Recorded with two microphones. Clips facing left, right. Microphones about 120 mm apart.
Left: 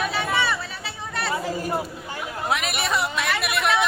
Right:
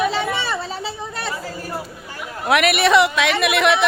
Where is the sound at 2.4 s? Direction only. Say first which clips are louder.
Right 10 dB; 75° right (ahead or behind); by 3.7 s 90° right.